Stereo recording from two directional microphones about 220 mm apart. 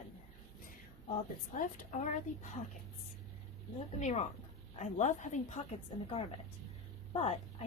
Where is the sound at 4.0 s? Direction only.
30° left (ahead or behind).